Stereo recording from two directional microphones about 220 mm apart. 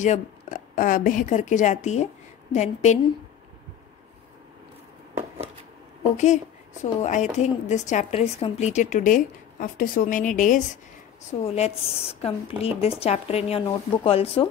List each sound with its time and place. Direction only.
0.0 s a woman's voice: 35° left (ahead or behind)
6.1 s a woman's voice: 30° left (ahead or behind)